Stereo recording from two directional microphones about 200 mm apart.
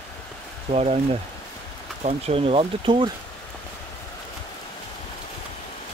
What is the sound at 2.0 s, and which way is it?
Speech, 30° right (ahead or behind).